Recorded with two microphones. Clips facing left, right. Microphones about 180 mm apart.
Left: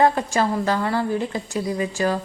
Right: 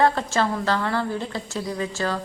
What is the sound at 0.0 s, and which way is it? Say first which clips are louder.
A woman's voice: left 2 dB; 15° left (ahead or behind).